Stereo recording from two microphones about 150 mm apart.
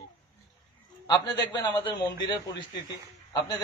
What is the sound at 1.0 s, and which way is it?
A man's voice, 30° left (ahead or behind).